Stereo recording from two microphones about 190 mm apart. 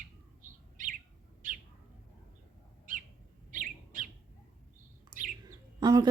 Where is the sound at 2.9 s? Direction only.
45° right (ahead or behind).